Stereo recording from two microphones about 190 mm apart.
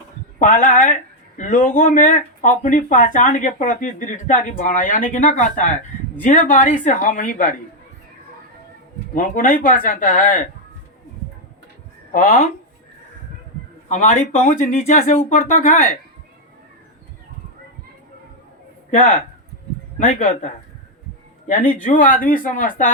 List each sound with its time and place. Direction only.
0.3 s speech: 45° left (ahead or behind)
9.1 s speech: 45° left (ahead or behind)
12.1 s speech: 45° left (ahead or behind)
13.8 s speech: 40° left (ahead or behind)
18.9 s speech: 40° left (ahead or behind)
21.8 s speech: 45° left (ahead or behind)